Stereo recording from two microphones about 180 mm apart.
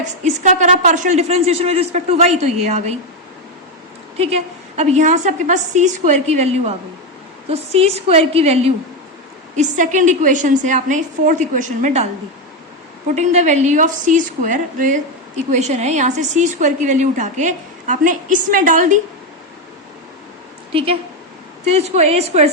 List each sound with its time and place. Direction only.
0.0 s a woman's voice: 40° right (ahead or behind)
4.2 s a woman's voice: 35° right (ahead or behind)
13.1 s a woman's voice: 40° right (ahead or behind)
20.7 s a woman's voice: 35° right (ahead or behind)